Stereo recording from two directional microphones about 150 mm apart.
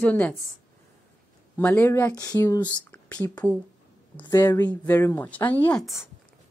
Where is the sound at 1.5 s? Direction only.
15° left (ahead or behind).